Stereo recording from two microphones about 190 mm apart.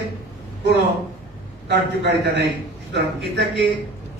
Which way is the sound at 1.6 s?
60° right (ahead or behind).